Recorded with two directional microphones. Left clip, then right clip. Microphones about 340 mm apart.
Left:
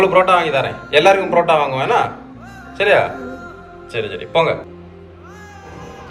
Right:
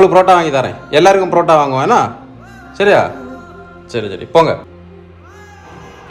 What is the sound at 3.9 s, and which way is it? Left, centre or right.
Speech, right.